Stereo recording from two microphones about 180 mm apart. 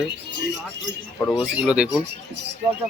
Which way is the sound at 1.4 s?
5° right (ahead or behind).